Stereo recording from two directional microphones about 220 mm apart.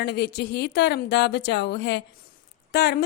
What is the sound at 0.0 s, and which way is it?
A woman's voice, 50° left (ahead or behind).